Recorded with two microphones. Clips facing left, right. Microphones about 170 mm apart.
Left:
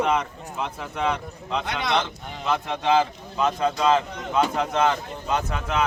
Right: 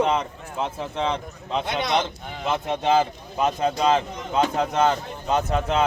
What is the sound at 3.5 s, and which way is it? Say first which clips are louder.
A man's voice: even; 30° right (ahead or behind).